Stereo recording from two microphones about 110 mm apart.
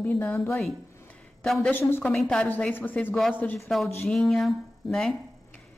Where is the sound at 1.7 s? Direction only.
20° left (ahead or behind).